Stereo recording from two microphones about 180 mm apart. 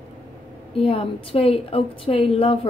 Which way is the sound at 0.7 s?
30° left (ahead or behind).